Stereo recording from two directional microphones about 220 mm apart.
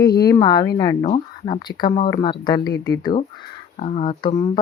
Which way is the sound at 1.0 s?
25° left (ahead or behind).